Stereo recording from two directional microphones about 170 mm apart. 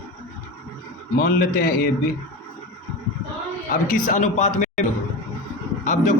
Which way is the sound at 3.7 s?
50° left (ahead or behind).